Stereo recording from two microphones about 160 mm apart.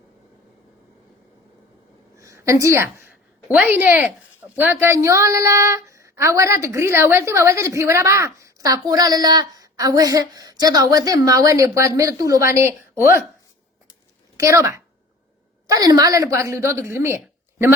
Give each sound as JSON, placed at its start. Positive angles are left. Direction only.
{"t": 2.1, "sound": "a woman's voice", "side_deg": -20}
{"t": 14.3, "sound": "a woman's voice", "side_deg": -20}